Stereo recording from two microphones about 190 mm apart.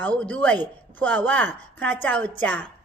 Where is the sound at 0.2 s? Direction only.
5° left (ahead or behind).